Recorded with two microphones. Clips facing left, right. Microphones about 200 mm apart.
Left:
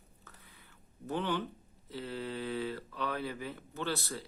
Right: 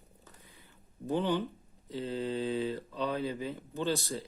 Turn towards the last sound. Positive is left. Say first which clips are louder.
# right 4 dB
turn(degrees=-15)  # may be behind; listen again after turning